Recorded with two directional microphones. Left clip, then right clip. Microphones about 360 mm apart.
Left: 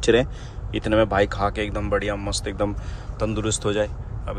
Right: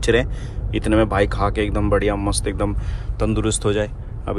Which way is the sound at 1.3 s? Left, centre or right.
Centre.